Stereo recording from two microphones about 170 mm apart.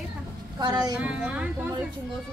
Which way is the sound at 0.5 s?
25° right (ahead or behind).